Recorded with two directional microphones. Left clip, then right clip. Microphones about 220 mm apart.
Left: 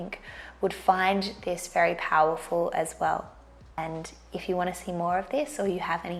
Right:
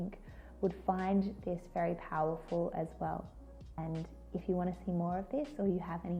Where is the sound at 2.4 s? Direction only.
30° left (ahead or behind).